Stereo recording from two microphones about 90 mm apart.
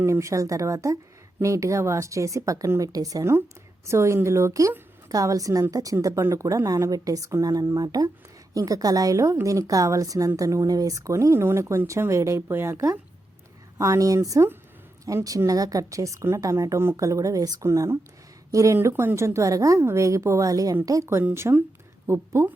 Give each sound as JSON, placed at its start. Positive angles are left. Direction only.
{"t": 0.0, "sound": "a woman's voice", "side_deg": -35}
{"t": 15.0, "sound": "a woman's voice", "side_deg": -40}